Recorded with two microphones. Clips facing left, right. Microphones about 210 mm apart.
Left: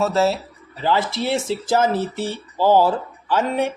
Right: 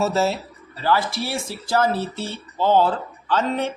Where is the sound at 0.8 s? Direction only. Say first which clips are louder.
Left 1 dB; 20° left (ahead or behind).